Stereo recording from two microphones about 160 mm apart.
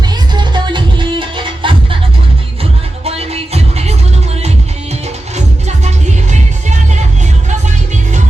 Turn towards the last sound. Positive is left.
turn(degrees=-45)  # may be behind; listen again after turning